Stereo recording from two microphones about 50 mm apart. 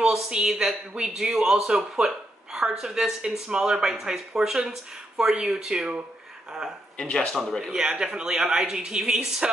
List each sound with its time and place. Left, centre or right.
0.0 s speech: centre
7.0 s speech: centre
7.7 s speech: centre